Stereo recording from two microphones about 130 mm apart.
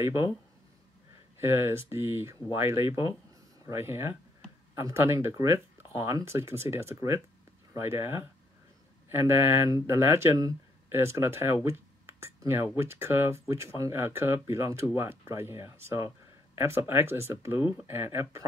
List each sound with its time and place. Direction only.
0.0 s speech: 20° right (ahead or behind)
1.4 s speech: 20° right (ahead or behind)